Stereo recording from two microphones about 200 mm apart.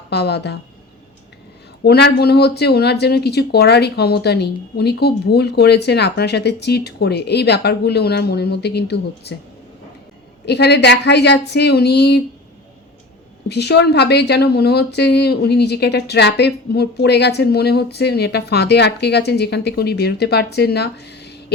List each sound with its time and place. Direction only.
0.1 s a woman's voice: 55° left (ahead or behind)
1.8 s a woman's voice: 55° left (ahead or behind)
10.4 s a woman's voice: 55° left (ahead or behind)
13.5 s a woman's voice: 55° left (ahead or behind)